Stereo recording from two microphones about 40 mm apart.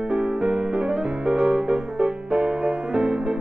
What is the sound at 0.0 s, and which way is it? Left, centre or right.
Music, right.